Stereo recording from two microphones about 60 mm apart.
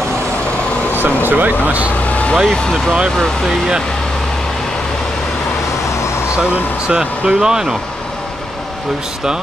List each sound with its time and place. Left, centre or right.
1.0 s speech: right
2.0 s vehicle: left
2.5 s speech: centre
3.4 s speech: centre
6.9 s speech: centre